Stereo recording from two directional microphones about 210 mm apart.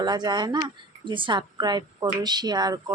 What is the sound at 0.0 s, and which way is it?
A woman's voice, 20° right (ahead or behind).